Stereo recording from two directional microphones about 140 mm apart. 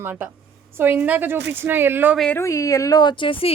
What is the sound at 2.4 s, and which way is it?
A woman's voice, 20° left (ahead or behind).